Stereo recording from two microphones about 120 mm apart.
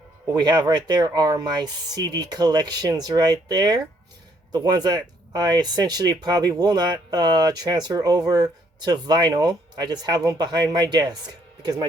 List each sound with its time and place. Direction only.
0.3 s speech: 35° right (ahead or behind)